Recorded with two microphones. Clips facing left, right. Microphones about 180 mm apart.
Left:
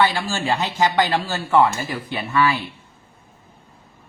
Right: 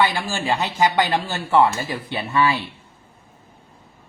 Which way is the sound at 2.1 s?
30° right (ahead or behind).